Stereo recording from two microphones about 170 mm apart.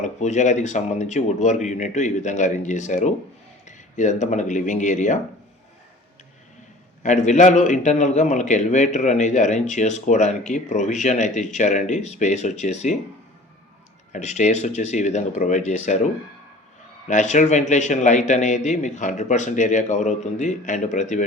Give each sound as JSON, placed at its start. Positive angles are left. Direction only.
{"t": 0.0, "sound": "a man's voice", "side_deg": 45}
{"t": 7.0, "sound": "a man's voice", "side_deg": 45}
{"t": 14.1, "sound": "a man's voice", "side_deg": 45}
{"t": 17.1, "sound": "a man's voice", "side_deg": 45}